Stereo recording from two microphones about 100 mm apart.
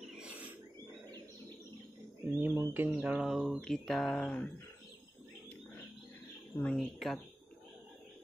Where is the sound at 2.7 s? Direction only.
20° right (ahead or behind).